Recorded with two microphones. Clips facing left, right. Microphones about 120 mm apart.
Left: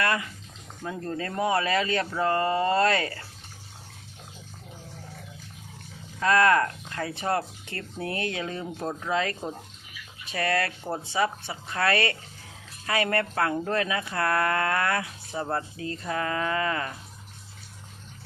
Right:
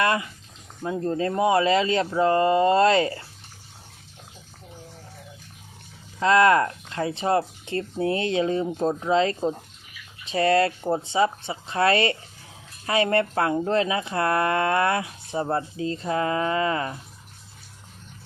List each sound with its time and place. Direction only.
0.0 s speech: 20° right (ahead or behind)
6.1 s speech: 25° right (ahead or behind)